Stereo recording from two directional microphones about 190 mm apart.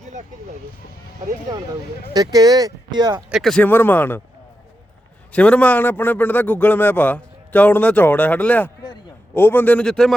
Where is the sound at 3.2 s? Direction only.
Centre (ahead or behind).